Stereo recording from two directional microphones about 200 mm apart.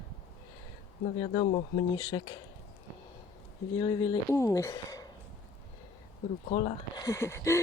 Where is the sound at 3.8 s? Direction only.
20° left (ahead or behind).